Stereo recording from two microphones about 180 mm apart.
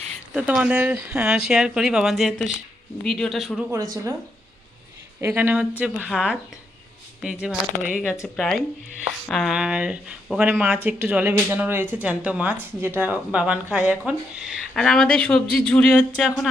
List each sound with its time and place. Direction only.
0.3 s speech: 5° right (ahead or behind)
3.7 s speech: 15° right (ahead or behind)
5.2 s speech: 10° right (ahead or behind)